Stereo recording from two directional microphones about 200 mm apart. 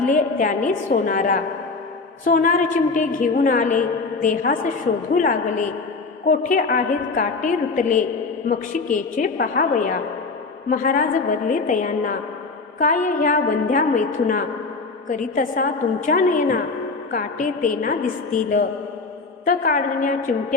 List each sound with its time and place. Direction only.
0.0 s a woman's voice: 40° left (ahead or behind)